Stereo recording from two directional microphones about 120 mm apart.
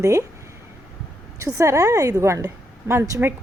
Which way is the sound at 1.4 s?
25° right (ahead or behind).